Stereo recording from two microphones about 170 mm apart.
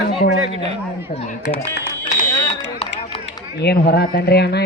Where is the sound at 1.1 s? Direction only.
50° left (ahead or behind).